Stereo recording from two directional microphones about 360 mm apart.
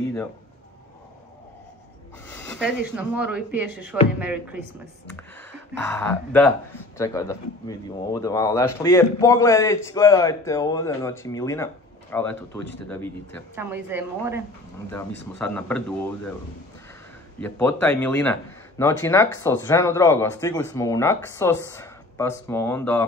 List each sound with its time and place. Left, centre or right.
2.2 s speech: centre
5.9 s speech: centre
13.6 s a woman's voice: centre
14.9 s speech: centre
17.4 s speech: centre